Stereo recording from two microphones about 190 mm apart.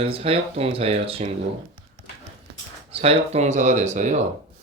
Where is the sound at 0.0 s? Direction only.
30° right (ahead or behind).